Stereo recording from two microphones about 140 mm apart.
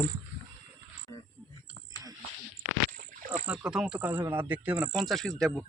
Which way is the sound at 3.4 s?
5° right (ahead or behind).